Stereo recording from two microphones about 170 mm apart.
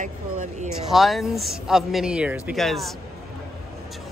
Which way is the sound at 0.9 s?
Centre (ahead or behind).